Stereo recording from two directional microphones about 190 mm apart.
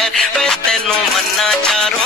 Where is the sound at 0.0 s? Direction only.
Centre (ahead or behind).